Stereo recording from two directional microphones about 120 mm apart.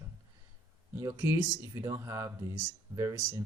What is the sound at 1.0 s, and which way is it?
Speech, 20° right (ahead or behind).